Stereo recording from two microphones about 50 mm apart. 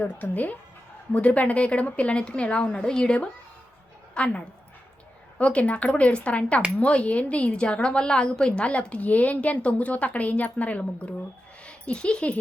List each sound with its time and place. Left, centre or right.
0.0 s a woman's voice: left